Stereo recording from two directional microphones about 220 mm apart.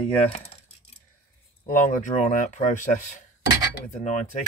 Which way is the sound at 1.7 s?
35° left (ahead or behind).